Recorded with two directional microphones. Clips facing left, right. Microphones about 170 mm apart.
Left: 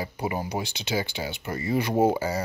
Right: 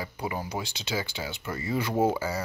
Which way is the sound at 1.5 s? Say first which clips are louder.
Left 3 dB; 35° left (ahead or behind).